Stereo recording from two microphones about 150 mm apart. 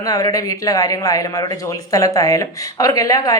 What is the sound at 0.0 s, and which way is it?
Speech, 25° left (ahead or behind).